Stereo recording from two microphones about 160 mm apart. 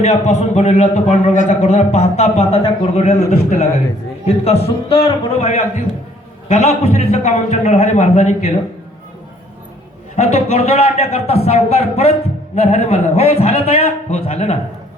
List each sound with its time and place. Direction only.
0.0 s a man's voice: 45° left (ahead or behind)
4.3 s a man's voice: 40° left (ahead or behind)
10.2 s a man's voice: 45° left (ahead or behind)